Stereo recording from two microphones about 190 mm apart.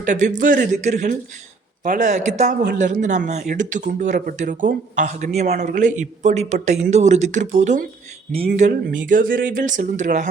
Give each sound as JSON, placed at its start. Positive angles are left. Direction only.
{"t": 0.0, "sound": "speech", "side_deg": -40}